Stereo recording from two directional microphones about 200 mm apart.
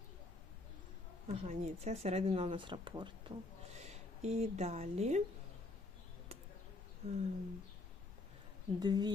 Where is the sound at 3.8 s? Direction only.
35° right (ahead or behind).